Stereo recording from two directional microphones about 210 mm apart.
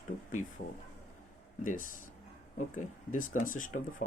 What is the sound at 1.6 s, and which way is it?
Speech, 40° left (ahead or behind).